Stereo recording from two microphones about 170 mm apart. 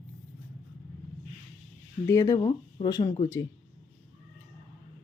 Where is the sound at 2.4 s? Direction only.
30° left (ahead or behind).